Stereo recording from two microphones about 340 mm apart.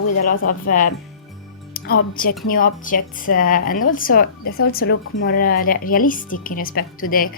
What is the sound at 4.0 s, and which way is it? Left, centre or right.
Speech, left.